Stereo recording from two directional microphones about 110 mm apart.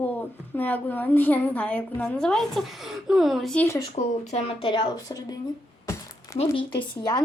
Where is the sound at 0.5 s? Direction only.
15° left (ahead or behind); by 3.5 s centre (ahead or behind).